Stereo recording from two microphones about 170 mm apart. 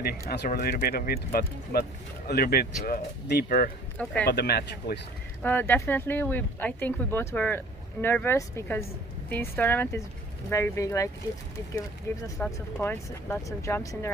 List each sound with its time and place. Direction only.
0.3 s speech: 65° left (ahead or behind)
4.0 s speech: 10° left (ahead or behind)
4.3 s speech: 70° left (ahead or behind)
5.4 s speech: 10° left (ahead or behind)
12.1 s speech: 15° left (ahead or behind)